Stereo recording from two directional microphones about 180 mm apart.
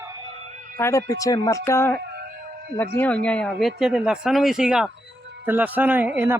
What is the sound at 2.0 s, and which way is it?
Music, 60° right (ahead or behind).